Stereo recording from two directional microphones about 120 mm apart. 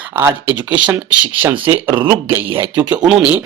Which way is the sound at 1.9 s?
40° right (ahead or behind).